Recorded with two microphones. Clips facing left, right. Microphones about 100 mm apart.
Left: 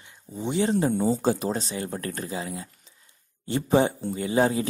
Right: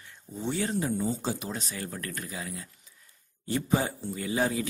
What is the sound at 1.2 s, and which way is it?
Speech, 50° left (ahead or behind).